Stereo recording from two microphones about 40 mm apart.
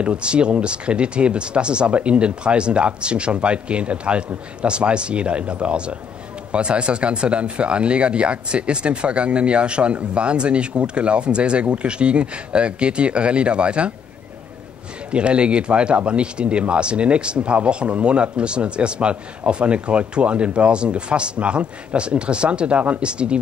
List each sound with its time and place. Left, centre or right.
0.0 s speech: right
15.0 s speech: right